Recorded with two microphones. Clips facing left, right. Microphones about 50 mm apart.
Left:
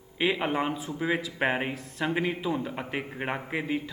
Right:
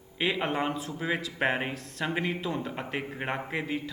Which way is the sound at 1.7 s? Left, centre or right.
Centre.